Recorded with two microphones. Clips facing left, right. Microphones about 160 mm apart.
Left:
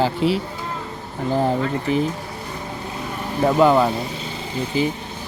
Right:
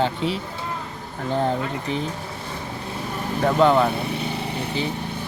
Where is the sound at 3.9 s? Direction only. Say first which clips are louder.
Right 2 dB; 65° right (ahead or behind).